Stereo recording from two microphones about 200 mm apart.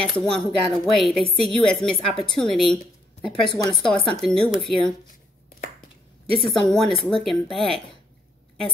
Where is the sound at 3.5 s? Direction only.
20° left (ahead or behind).